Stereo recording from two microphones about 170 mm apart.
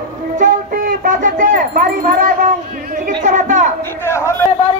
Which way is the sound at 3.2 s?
45° right (ahead or behind).